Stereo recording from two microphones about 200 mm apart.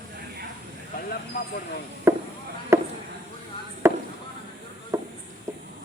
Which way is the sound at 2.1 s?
15° right (ahead or behind).